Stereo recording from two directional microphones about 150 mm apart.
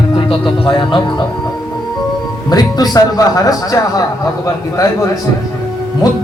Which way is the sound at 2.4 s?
25° left (ahead or behind).